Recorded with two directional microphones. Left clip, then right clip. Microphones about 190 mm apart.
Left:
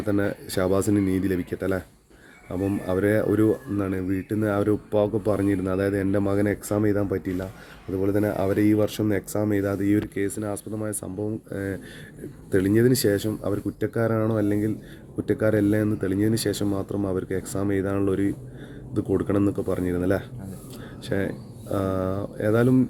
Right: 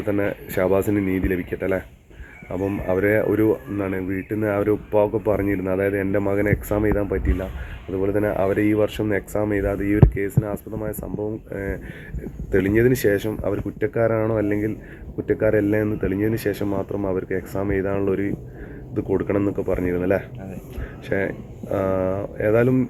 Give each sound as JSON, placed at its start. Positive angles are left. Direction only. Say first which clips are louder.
{"t": 0.0, "sound": "speech", "louder": "right 2 dB", "side_deg": 65}
{"t": 21.1, "sound": "speech", "louder": "right 4 dB", "side_deg": 90}